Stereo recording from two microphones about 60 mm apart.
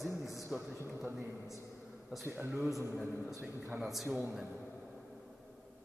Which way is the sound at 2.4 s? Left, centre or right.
Right.